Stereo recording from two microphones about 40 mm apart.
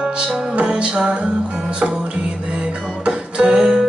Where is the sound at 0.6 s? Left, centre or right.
Right.